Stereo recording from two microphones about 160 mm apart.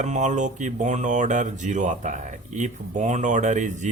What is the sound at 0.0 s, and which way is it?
Speech, 50° right (ahead or behind).